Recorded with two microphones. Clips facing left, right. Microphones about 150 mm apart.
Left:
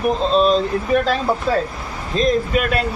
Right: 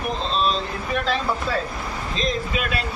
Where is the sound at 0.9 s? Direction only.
45° left (ahead or behind).